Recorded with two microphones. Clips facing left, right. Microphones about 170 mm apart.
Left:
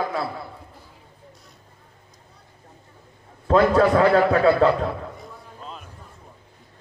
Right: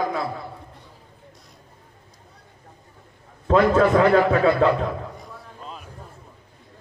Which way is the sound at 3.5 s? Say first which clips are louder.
Even; 35° left (ahead or behind).